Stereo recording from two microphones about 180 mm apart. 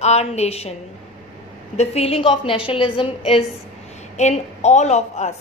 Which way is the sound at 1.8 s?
35° left (ahead or behind).